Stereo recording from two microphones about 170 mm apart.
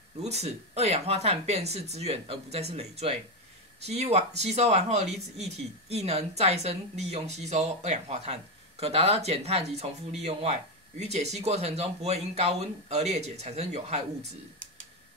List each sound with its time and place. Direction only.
0.2 s speech: 40° right (ahead or behind)